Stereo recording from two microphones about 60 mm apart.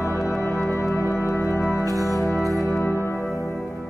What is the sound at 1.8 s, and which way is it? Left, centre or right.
Organ, right.